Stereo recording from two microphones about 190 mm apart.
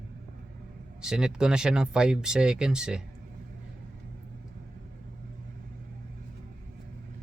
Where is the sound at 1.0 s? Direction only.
5° right (ahead or behind).